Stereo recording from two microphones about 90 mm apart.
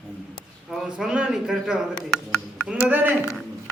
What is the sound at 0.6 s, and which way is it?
A man's voice, 5° right (ahead or behind).